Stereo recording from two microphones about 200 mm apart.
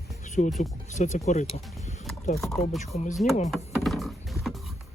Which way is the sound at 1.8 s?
35° left (ahead or behind).